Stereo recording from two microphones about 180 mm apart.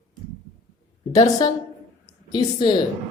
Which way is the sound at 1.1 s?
20° left (ahead or behind).